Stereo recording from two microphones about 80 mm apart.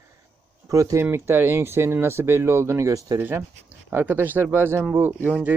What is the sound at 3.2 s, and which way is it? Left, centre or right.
Speech, right.